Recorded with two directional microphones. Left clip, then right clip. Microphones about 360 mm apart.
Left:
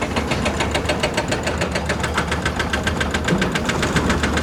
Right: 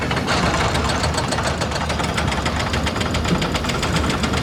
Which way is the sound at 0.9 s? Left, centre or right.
Left.